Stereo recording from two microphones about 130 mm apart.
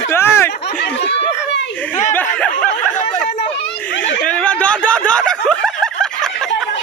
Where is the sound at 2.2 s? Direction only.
10° left (ahead or behind).